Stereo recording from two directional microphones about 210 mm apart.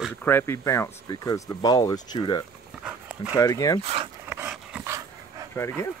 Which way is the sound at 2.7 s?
5° right (ahead or behind).